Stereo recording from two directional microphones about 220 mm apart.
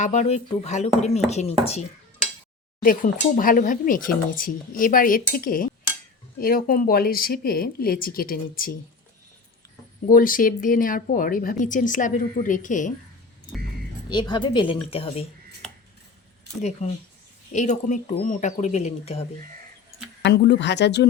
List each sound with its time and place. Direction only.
0.0 s a woman's voice: 30° left (ahead or behind)
2.8 s speech: 40° left (ahead or behind)
10.1 s speech: 40° left (ahead or behind)
14.1 s a woman's voice: 20° left (ahead or behind)
15.6 s a sound: 5° left (ahead or behind)
16.6 s speech: 30° left (ahead or behind)
20.2 s speech: 50° left (ahead or behind)